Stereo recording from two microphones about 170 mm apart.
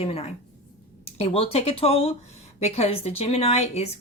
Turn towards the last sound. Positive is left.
turn(degrees=40)  # may be behind; listen again after turning